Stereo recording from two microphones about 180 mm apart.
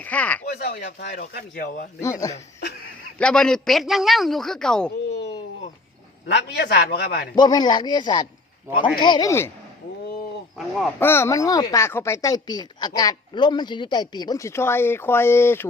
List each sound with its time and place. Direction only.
0.0 s speech: 10° left (ahead or behind)
0.4 s a man's voice: 65° left (ahead or behind); by 1.9 s 45° left (ahead or behind)
2.0 s a woman's voice: 20° left (ahead or behind)
3.2 s a man's voice: 5° left (ahead or behind)
6.2 s a man's voice: 65° left (ahead or behind)
7.3 s a woman's voice: 25° left (ahead or behind)
11.0 s a woman's voice: 15° left (ahead or behind)